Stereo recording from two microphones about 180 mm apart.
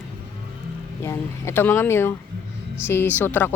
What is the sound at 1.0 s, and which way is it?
Speech, 15° left (ahead or behind).